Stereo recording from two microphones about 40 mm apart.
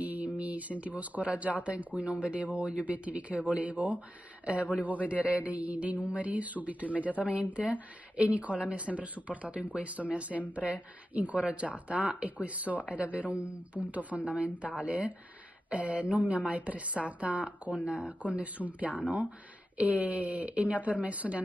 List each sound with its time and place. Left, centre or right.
0.0 s a sound: right
0.4 s a woman's voice: right
5.0 s a woman's voice: right